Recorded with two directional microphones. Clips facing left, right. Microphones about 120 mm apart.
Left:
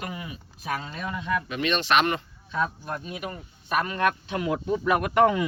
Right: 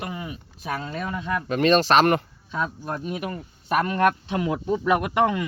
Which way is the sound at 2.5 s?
25° right (ahead or behind).